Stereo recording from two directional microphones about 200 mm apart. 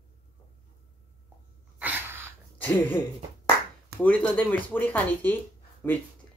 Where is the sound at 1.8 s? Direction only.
10° right (ahead or behind).